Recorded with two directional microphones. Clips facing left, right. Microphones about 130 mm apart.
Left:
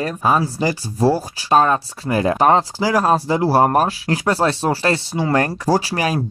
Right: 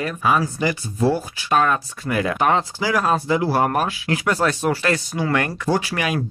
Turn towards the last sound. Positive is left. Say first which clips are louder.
# left 3 dB
turn(degrees=35)  # may be behind; listen again after turning